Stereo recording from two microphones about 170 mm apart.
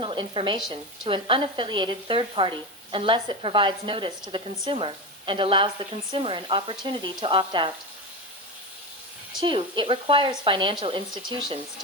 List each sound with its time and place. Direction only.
0.0 s speech: 30° right (ahead or behind)
9.4 s speech: 30° right (ahead or behind)